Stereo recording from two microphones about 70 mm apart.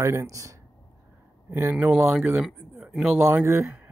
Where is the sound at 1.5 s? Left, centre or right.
Right.